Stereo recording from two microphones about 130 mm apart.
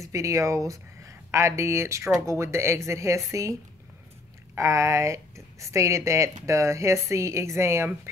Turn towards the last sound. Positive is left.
turn(degrees=-20)  # may be behind; listen again after turning